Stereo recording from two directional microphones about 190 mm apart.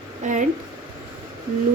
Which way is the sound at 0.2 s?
40° right (ahead or behind).